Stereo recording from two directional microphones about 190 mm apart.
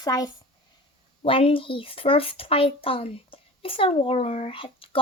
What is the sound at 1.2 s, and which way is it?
A child's voice, 30° left (ahead or behind).